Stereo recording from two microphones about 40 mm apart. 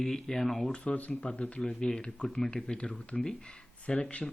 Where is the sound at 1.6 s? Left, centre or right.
Centre.